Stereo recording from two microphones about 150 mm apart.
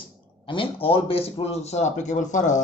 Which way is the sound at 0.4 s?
35° left (ahead or behind).